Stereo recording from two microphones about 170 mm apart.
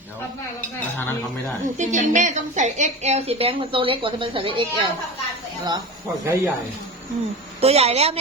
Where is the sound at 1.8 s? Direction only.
45° right (ahead or behind).